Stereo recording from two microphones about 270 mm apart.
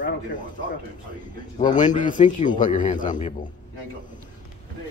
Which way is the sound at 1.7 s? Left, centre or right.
Left.